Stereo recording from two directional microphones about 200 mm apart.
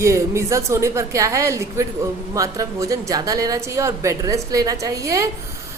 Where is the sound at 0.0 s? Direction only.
15° right (ahead or behind).